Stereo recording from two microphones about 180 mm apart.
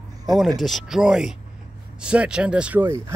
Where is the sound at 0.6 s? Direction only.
Centre (ahead or behind).